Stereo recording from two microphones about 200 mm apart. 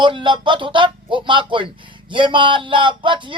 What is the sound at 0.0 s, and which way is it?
Speech, 25° right (ahead or behind).